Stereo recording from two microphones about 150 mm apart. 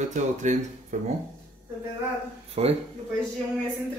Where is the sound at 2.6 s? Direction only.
40° right (ahead or behind).